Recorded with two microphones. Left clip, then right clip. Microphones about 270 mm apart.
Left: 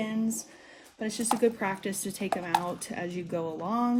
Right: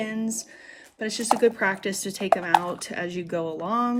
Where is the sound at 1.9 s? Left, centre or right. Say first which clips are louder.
Right 5 dB; right.